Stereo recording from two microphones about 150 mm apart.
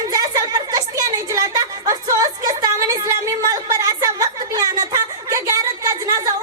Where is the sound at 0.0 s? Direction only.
25° right (ahead or behind).